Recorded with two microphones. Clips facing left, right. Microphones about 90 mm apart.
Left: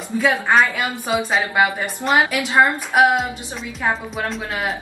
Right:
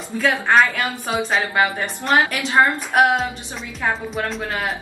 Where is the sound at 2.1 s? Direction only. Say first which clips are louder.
Even; 15° left (ahead or behind).